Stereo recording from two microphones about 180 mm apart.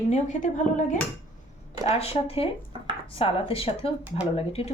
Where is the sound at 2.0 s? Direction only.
35° left (ahead or behind).